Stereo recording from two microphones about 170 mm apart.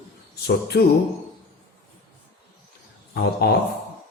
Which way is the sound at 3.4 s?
70° left (ahead or behind).